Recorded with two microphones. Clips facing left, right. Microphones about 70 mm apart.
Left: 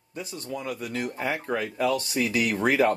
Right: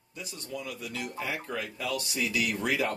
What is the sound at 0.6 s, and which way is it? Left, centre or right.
Speech, left.